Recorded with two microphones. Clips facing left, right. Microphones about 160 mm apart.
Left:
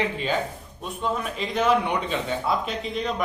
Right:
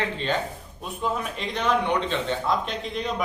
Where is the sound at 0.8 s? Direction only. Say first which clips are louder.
Even; centre (ahead or behind).